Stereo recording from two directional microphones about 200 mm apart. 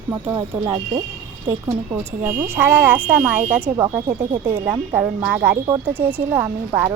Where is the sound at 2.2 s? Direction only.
10° right (ahead or behind).